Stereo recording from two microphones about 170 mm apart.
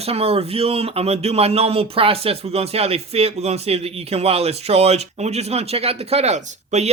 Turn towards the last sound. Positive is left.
turn(degrees=-45)  # may be behind; listen again after turning